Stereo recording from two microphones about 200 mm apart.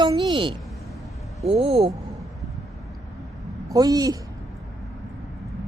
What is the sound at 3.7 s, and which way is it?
Speech, 20° right (ahead or behind).